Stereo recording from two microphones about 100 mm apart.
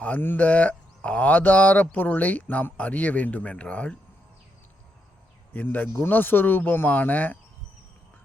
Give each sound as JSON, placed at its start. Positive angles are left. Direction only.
{"t": 0.0, "sound": "speech", "side_deg": 20}
{"t": 5.5, "sound": "speech", "side_deg": 20}